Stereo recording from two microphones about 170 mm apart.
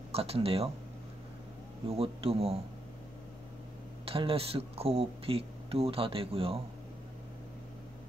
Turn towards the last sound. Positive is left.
turn(degrees=-35)  # may be behind; listen again after turning